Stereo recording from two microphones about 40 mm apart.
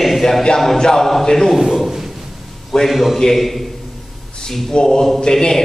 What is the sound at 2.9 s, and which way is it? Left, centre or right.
Speech, centre.